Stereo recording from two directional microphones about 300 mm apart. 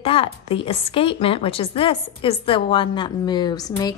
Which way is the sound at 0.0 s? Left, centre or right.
Centre.